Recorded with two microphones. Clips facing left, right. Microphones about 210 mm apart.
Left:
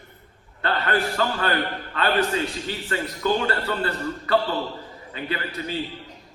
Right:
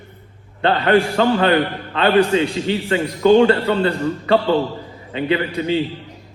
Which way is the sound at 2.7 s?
25° right (ahead or behind).